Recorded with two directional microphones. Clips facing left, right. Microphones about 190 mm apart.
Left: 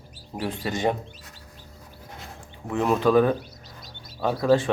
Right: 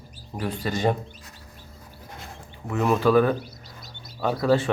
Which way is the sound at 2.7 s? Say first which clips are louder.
Even; 15° left (ahead or behind).